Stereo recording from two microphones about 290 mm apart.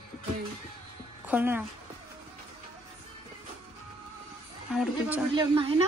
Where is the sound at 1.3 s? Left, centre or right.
Centre.